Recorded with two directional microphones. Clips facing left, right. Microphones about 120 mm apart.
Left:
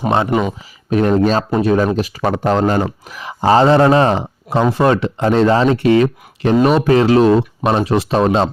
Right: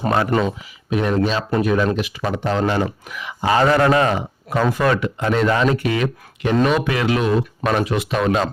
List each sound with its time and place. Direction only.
0.3 s speech: 15° left (ahead or behind)
0.9 s speech: 45° left (ahead or behind)
1.6 s speech: 30° left (ahead or behind)